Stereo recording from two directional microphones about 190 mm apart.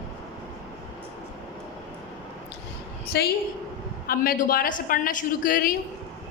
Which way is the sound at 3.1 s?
60° left (ahead or behind).